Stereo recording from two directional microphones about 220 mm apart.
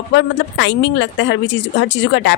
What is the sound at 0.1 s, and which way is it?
Speech, 55° left (ahead or behind).